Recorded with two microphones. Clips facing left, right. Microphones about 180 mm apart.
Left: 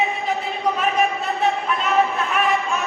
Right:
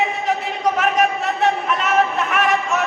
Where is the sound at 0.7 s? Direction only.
80° right.